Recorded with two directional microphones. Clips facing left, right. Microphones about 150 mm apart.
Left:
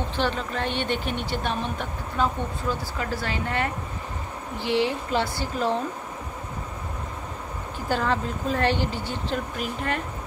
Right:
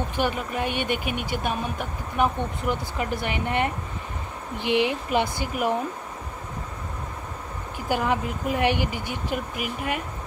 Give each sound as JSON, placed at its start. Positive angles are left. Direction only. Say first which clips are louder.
{"t": 0.1, "sound": "speech", "louder": "right 1 dB", "side_deg": -10}
{"t": 7.9, "sound": "speech", "louder": "right 1 dB", "side_deg": -15}